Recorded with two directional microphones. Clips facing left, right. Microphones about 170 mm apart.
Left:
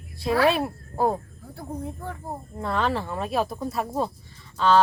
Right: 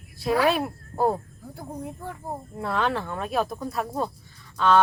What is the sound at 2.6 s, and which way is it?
A child's voice, centre (ahead or behind).